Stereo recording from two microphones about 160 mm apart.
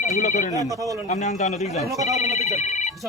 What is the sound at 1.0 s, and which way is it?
A man's voice, 45° left (ahead or behind).